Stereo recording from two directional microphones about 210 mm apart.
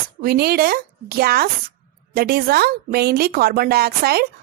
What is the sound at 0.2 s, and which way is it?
A woman's voice, 45° right (ahead or behind).